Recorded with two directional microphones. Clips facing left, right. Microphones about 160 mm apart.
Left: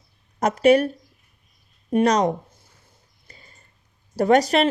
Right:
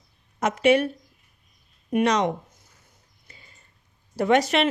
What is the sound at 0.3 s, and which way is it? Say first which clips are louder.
Speech: left 3 dB; 35° left (ahead or behind).